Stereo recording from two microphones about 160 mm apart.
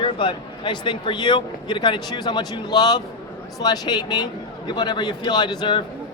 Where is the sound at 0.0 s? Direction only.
30° left (ahead or behind).